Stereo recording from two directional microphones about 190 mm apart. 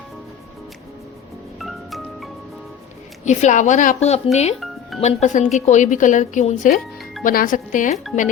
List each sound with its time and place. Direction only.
1.5 s glockenspiel: centre (ahead or behind)
3.2 s speech: 40° left (ahead or behind)